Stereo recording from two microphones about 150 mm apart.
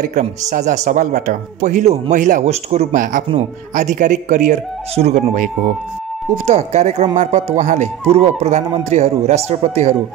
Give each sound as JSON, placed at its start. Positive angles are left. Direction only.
{"t": 0.1, "sound": "speech", "side_deg": -50}